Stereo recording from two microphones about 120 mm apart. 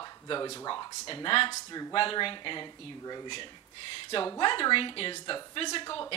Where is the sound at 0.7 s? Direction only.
50° left (ahead or behind).